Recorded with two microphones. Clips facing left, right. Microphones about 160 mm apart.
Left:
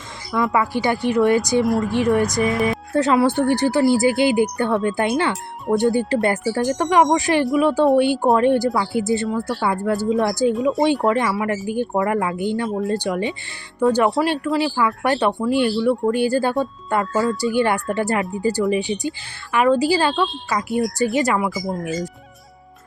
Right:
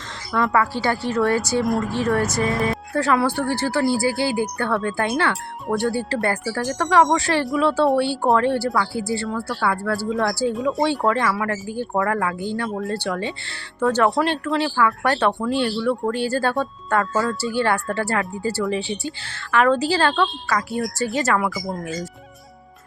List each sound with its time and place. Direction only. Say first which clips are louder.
0.5 s speech: left 2 dB; 15° left (ahead or behind)